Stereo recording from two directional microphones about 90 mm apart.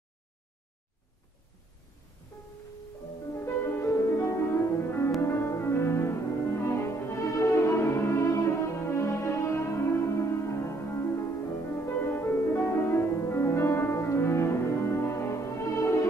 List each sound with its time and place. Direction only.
3.3 s music: 25° left (ahead or behind)